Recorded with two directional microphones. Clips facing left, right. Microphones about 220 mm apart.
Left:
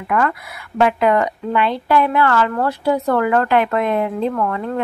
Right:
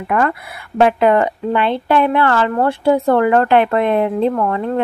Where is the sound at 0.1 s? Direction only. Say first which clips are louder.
Right 2 dB; 30° right (ahead or behind).